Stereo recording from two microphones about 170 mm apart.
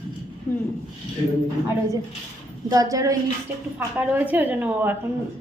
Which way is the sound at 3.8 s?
10° right (ahead or behind).